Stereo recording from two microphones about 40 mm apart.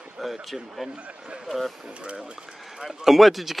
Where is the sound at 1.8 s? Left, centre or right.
Right.